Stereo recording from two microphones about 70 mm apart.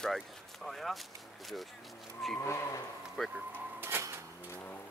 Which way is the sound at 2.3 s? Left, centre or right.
Left.